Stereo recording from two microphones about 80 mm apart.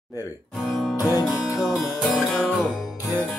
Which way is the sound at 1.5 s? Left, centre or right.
Left.